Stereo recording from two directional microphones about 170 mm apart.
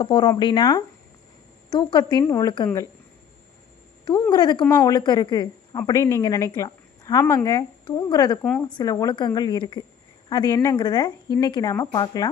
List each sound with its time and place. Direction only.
0.0 s speech: 30° left (ahead or behind)
4.0 s a woman's voice: 25° left (ahead or behind)